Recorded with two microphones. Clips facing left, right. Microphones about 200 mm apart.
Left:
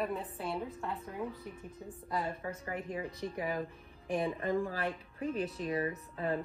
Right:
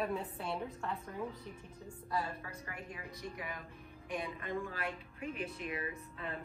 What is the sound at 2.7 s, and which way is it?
A woman's voice, 30° left (ahead or behind).